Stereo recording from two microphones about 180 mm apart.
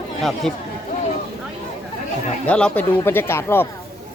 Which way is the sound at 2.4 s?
5° left (ahead or behind).